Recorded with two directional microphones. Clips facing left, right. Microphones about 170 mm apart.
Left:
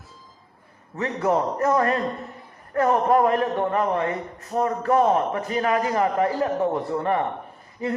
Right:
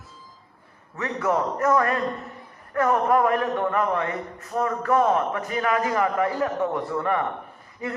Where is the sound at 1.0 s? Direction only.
30° left (ahead or behind).